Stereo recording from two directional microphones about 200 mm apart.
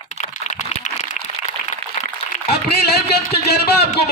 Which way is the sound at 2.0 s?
35° left (ahead or behind).